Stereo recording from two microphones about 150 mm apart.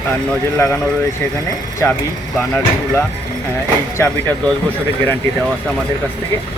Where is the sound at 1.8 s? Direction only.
20° left (ahead or behind).